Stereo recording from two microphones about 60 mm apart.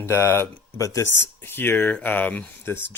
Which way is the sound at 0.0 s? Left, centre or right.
Left.